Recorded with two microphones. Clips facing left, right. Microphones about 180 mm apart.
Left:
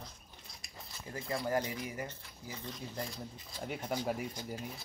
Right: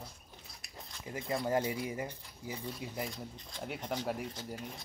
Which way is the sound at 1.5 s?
25° right (ahead or behind).